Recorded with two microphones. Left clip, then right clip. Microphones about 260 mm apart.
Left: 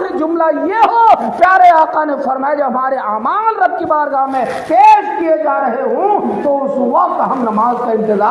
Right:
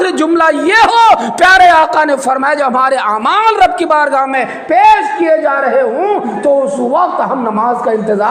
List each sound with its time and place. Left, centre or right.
0.4 s a man's voice: right
4.7 s a man's voice: right